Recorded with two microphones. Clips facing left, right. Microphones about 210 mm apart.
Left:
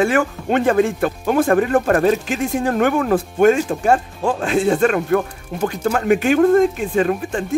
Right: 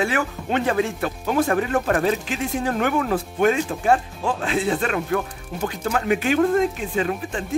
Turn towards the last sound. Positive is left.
turn(degrees=50)  # may be behind; listen again after turning